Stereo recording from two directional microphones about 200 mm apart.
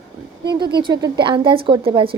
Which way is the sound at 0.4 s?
20° right (ahead or behind).